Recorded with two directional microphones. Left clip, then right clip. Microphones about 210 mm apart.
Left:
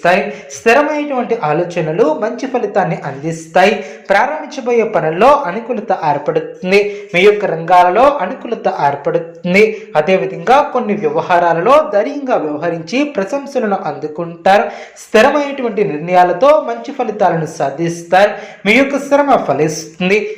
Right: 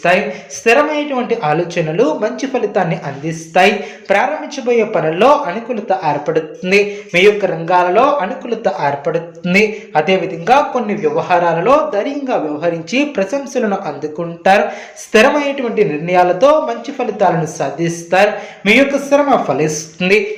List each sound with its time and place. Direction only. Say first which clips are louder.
0.0 s speech: left 1 dB; 15° left (ahead or behind)
3.2 s speech: left 1 dB; 15° left (ahead or behind)
4.1 s speech: left 1 dB; 5° left (ahead or behind)